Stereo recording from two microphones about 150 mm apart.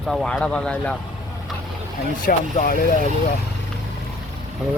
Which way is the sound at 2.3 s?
70° left (ahead or behind).